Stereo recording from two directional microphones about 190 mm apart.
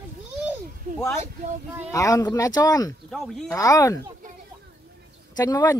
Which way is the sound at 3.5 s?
15° left (ahead or behind).